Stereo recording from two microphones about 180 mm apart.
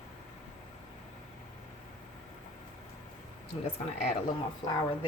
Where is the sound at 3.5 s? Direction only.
35° left (ahead or behind).